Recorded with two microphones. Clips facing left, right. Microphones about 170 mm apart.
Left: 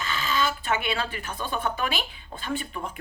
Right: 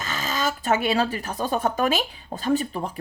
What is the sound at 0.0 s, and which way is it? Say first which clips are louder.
Speech: even; 40° right (ahead or behind).